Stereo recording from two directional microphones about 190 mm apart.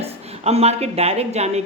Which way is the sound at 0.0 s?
35° right (ahead or behind).